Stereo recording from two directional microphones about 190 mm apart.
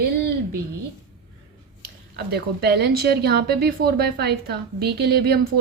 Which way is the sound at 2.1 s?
55° right (ahead or behind).